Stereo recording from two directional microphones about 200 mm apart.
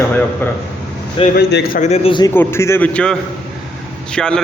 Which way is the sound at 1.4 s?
55° left (ahead or behind).